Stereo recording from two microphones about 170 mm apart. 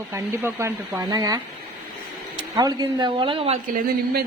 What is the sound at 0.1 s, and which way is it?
A woman's voice, 15° right (ahead or behind).